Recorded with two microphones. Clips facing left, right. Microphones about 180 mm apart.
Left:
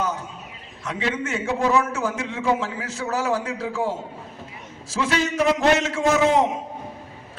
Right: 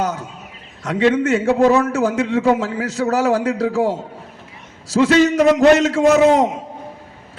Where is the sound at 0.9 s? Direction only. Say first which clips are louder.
Right 11 dB; 70° right (ahead or behind).